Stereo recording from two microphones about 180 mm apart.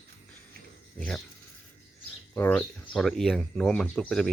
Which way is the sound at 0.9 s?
5° left (ahead or behind).